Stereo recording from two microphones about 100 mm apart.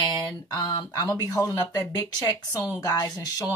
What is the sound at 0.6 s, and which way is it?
Speech, 40° left (ahead or behind).